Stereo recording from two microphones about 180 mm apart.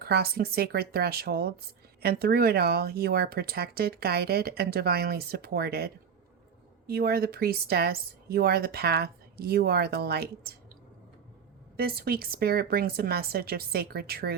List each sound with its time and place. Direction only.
0.0 s speech: 60° right (ahead or behind)
11.8 s speech: 60° right (ahead or behind)